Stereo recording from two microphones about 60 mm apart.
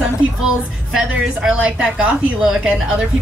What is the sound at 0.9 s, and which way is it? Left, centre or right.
Speech, centre.